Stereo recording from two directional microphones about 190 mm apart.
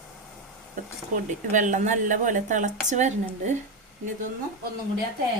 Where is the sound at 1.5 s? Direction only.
40° right (ahead or behind).